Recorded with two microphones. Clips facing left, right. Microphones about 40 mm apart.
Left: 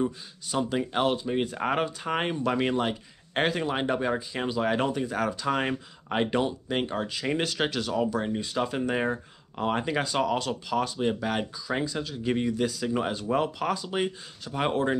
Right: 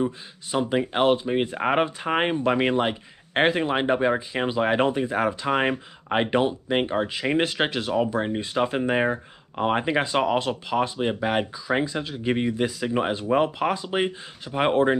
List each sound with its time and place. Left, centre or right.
0.0 s speech: right